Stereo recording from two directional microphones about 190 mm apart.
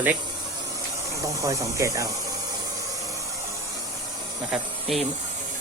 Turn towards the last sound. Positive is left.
turn(degrees=0)  # may be behind; listen again after turning